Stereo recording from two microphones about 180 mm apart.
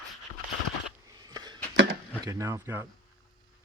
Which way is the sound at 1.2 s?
20° right (ahead or behind).